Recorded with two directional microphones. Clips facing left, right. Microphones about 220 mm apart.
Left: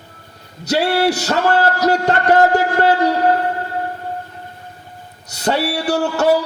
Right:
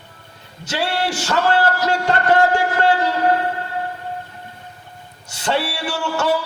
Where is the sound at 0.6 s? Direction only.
40° left (ahead or behind).